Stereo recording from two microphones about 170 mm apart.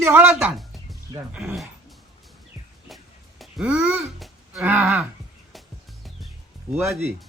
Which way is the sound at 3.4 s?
5° right (ahead or behind).